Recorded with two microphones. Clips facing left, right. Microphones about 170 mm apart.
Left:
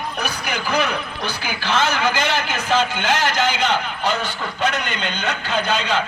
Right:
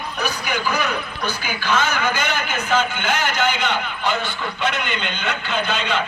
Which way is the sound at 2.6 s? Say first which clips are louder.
Left 1 dB; 40° left (ahead or behind).